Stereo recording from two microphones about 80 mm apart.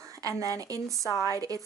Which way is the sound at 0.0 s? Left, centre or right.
Right.